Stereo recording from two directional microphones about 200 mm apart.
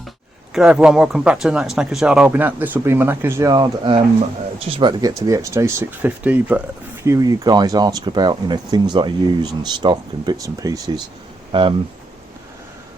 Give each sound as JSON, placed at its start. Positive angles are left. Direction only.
{"t": 0.5, "sound": "speech", "side_deg": -5}